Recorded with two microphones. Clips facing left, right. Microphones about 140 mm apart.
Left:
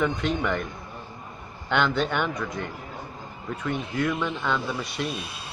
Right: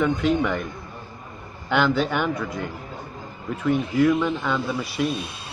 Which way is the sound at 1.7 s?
5° right (ahead or behind).